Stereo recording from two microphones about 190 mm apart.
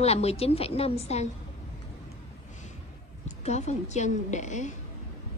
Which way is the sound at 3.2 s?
35° left (ahead or behind).